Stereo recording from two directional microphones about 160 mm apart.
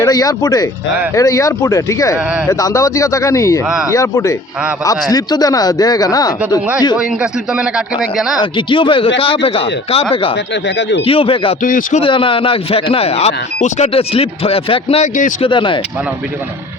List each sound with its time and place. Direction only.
0.0 s speech: 25° left (ahead or behind)
3.6 s speech: 10° right (ahead or behind)
3.9 s speech: 20° left (ahead or behind)
6.9 s a man's voice: 5° right (ahead or behind)
8.5 s speech: 30° left (ahead or behind)
10.3 s speech: 90° left
11.0 s speech: 35° left (ahead or behind)
11.6 s a man's voice: 60° left (ahead or behind)
11.9 s speech: 35° left (ahead or behind)